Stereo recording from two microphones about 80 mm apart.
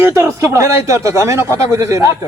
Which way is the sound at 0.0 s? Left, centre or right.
Right.